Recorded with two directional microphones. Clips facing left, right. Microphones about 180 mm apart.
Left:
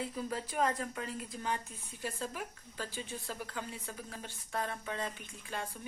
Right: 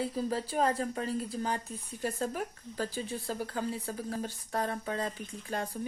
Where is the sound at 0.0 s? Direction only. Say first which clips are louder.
Right 6 dB; 35° right (ahead or behind).